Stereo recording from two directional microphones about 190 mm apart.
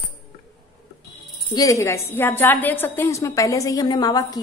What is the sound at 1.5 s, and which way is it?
A woman's voice, 15° left (ahead or behind).